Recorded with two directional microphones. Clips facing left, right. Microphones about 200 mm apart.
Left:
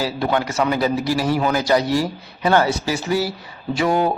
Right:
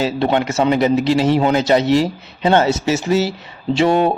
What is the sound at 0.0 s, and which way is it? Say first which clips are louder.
Speech: right 4 dB; 25° right (ahead or behind).